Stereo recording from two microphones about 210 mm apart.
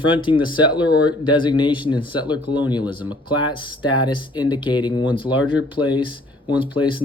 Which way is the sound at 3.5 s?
20° left (ahead or behind).